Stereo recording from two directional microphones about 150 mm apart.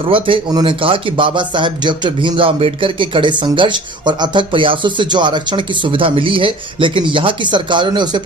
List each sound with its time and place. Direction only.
0.1 s speech: 35° right (ahead or behind)